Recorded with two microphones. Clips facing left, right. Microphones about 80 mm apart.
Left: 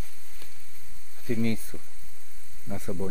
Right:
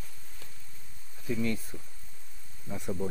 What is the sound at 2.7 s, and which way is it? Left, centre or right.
Speech, centre.